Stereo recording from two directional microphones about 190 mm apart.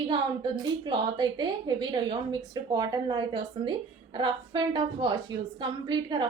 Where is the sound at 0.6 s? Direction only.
25° right (ahead or behind).